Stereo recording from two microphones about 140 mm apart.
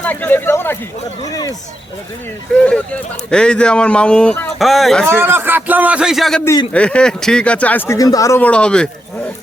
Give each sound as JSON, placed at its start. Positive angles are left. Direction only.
{"t": 0.0, "sound": "speech", "side_deg": 10}
{"t": 2.6, "sound": "speech", "side_deg": 10}
{"t": 5.2, "sound": "a man's voice", "side_deg": -15}
{"t": 8.4, "sound": "speech", "side_deg": 10}